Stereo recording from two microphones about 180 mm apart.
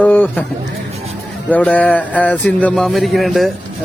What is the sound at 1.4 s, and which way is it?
Speech, 10° left (ahead or behind).